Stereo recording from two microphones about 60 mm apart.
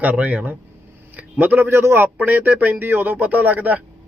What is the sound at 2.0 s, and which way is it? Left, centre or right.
Speech, right.